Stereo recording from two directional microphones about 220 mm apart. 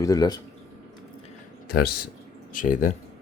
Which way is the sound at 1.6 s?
45° left (ahead or behind).